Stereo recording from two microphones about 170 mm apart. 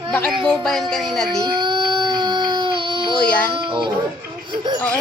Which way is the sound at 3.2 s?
5° left (ahead or behind).